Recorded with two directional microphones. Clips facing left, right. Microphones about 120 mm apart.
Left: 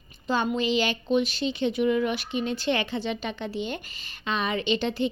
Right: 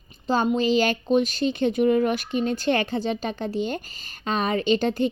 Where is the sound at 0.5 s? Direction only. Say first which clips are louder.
Right 4 dB; 40° right (ahead or behind).